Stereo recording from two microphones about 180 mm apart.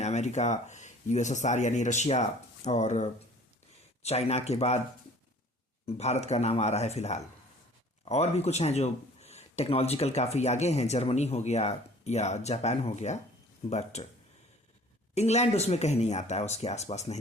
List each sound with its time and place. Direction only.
0.0 s speech: 40° left (ahead or behind)
5.8 s speech: 40° left (ahead or behind)
15.1 s speech: 40° left (ahead or behind)